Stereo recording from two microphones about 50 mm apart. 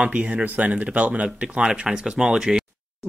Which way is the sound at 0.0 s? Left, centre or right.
Right.